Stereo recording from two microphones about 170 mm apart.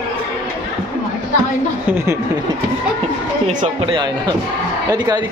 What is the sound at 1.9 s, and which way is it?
Speech, 15° right (ahead or behind).